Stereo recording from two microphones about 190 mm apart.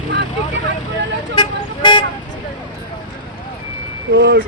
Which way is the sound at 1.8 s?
25° left (ahead or behind).